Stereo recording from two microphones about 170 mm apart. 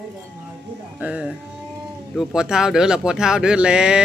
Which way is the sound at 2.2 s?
5° right (ahead or behind).